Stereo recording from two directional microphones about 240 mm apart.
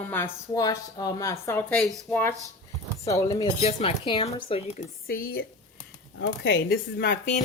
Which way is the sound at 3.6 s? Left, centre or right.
Left.